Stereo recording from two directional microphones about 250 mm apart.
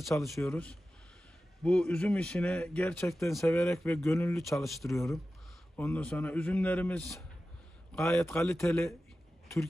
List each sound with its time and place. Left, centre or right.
0.2 s speech: centre
3.4 s speech: centre
4.4 s speech: centre
4.9 s speech: centre